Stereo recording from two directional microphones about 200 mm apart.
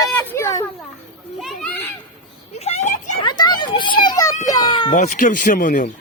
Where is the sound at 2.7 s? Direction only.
35° left (ahead or behind).